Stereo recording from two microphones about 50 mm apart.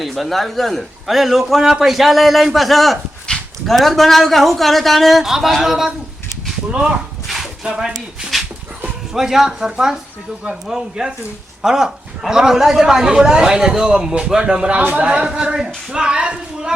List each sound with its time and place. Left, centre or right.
0.0 s a man's voice: centre
3.3 s dog: centre
3.7 s a man's voice: centre
6.7 s speech: right
7.3 s a sound: centre
7.6 s a man's voice: centre
8.3 s dog: centre
9.1 s a man's voice: centre
14.8 s speech: right
15.0 s a man's voice: centre